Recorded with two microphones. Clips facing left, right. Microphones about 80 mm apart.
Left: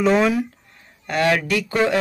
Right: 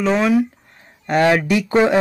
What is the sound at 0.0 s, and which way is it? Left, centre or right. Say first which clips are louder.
Speech: right 1 dB; centre.